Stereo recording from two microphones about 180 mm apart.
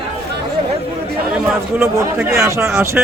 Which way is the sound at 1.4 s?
10° right (ahead or behind).